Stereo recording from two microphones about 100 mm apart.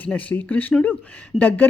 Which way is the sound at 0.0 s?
15° left (ahead or behind).